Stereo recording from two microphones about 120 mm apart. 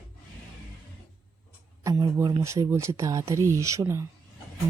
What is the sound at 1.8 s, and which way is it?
Speech, 25° right (ahead or behind).